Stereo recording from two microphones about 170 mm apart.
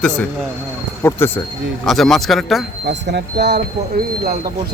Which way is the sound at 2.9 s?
85° right.